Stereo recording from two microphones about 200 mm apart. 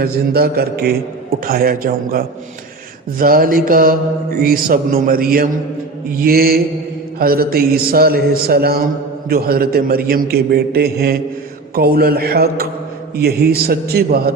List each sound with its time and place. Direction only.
0.0 s mantra: 50° right (ahead or behind)